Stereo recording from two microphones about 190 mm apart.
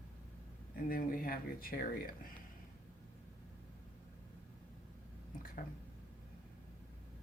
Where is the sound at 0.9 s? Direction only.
50° left (ahead or behind).